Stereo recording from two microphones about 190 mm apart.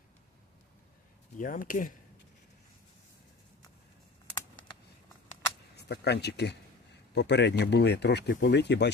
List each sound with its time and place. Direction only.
1.4 s speech: 45° left (ahead or behind)
5.7 s speech: 60° left (ahead or behind)